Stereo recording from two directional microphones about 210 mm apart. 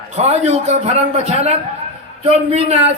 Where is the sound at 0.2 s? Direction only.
30° right (ahead or behind).